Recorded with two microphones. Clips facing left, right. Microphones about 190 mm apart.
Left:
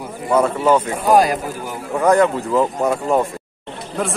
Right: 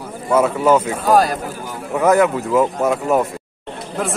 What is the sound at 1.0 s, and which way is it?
Speech, 15° left (ahead or behind).